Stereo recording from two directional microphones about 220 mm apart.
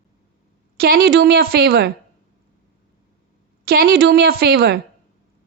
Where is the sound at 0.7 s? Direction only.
45° right (ahead or behind).